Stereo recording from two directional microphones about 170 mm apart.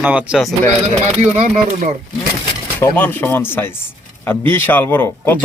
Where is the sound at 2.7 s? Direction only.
10° left (ahead or behind).